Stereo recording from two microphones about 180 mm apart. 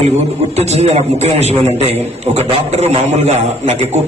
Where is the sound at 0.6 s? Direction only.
35° right (ahead or behind).